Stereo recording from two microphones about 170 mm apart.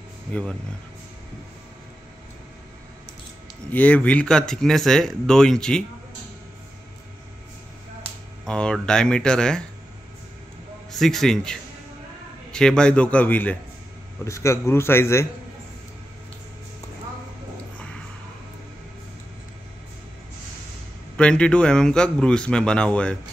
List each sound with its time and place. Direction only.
0.3 s a man's voice: 5° left (ahead or behind)
3.7 s speech: 10° left (ahead or behind)
8.5 s speech: 5° left (ahead or behind)
10.9 s a man's voice: centre (ahead or behind)
21.2 s speech: 5° left (ahead or behind)